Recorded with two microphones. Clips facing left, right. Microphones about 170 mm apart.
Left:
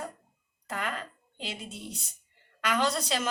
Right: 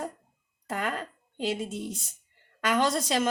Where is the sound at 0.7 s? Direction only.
45° right (ahead or behind).